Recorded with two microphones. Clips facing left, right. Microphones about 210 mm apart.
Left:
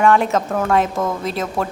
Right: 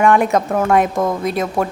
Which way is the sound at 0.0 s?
15° right (ahead or behind).